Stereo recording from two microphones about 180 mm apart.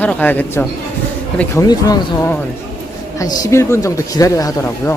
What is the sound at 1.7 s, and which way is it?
Speech, 20° left (ahead or behind).